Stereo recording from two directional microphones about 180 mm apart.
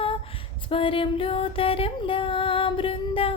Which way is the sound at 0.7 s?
30° left (ahead or behind).